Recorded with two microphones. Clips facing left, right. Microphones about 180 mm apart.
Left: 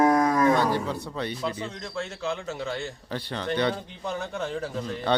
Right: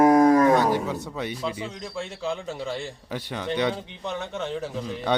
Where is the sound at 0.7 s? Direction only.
15° right (ahead or behind).